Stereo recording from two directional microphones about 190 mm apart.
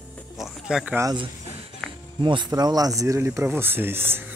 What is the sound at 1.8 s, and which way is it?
Music, centre (ahead or behind).